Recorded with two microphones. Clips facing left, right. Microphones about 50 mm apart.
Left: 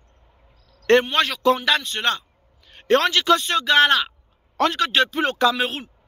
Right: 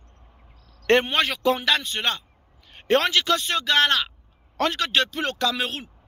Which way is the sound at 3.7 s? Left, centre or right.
Centre.